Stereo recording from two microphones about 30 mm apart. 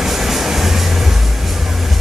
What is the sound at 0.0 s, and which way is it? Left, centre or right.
Vehicle, centre.